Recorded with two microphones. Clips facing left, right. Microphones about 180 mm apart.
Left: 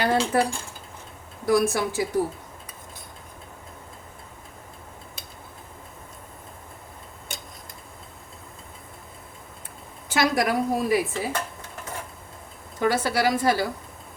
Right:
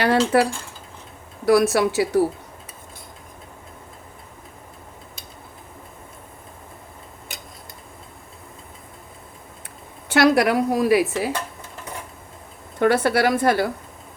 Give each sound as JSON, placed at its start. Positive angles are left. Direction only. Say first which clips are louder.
{"t": 0.0, "sound": "a woman's voice", "louder": "right 4 dB", "side_deg": -70}
{"t": 1.5, "sound": "a woman's voice", "louder": "right 5 dB", "side_deg": -75}
{"t": 10.1, "sound": "a woman's voice", "louder": "right 6 dB", "side_deg": -70}
{"t": 12.8, "sound": "a woman's voice", "louder": "right 5 dB", "side_deg": -60}